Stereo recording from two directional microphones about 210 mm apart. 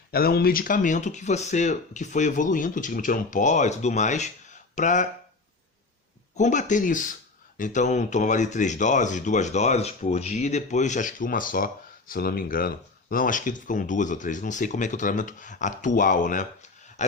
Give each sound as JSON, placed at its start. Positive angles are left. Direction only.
{"t": 0.1, "sound": "speech", "side_deg": 45}
{"t": 6.3, "sound": "speech", "side_deg": 35}
{"t": 17.0, "sound": "a sound", "side_deg": 35}